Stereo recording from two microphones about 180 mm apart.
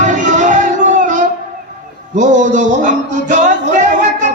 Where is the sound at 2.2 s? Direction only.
45° right (ahead or behind).